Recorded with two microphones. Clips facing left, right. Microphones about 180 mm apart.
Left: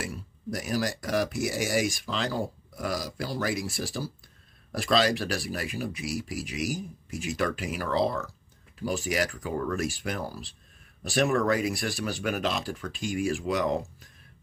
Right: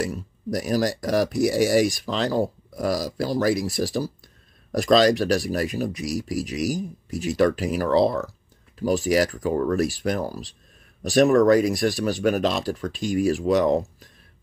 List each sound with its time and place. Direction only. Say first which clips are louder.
0.0 s speech: right 8 dB; 40° right (ahead or behind)